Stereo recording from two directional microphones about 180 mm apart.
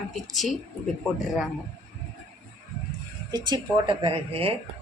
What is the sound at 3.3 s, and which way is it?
Speech, 25° right (ahead or behind).